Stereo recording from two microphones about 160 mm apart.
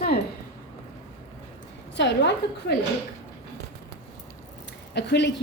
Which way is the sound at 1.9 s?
90° left.